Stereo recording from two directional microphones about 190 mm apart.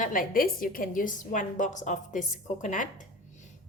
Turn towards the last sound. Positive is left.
turn(degrees=40)  # may be behind; listen again after turning